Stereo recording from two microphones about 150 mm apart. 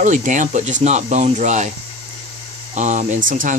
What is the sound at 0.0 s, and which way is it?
Speech, 60° right (ahead or behind).